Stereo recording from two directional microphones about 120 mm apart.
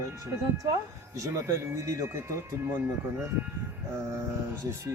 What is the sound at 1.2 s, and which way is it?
Speech, 25° right (ahead or behind).